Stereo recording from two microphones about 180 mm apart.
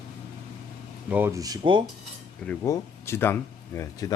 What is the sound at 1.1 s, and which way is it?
Speech, 15° right (ahead or behind).